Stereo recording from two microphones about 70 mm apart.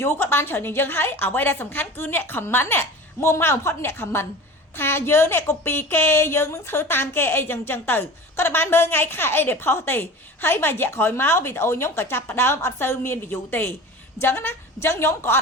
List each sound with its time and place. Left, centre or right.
0.0 s a woman's voice: left